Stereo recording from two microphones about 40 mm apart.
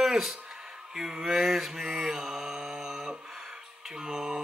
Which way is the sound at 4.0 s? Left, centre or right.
Centre.